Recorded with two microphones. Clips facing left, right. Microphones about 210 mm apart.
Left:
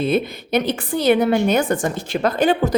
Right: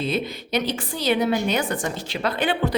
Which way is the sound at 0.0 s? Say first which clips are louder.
Left 6 dB; 55° left (ahead or behind).